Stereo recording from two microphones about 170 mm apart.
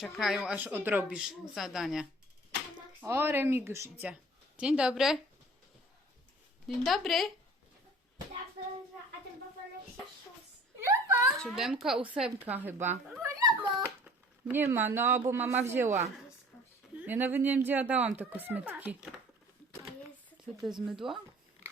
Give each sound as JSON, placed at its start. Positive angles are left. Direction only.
{"t": 0.0, "sound": "speech", "side_deg": 0}
{"t": 3.0, "sound": "speech", "side_deg": -15}
{"t": 6.7, "sound": "speech", "side_deg": 0}
{"t": 10.8, "sound": "a sound", "side_deg": -15}
{"t": 11.3, "sound": "speech", "side_deg": 0}
{"t": 13.2, "sound": "a sound", "side_deg": -20}
{"t": 13.8, "sound": "speech", "side_deg": -10}
{"t": 20.7, "sound": "speech", "side_deg": 0}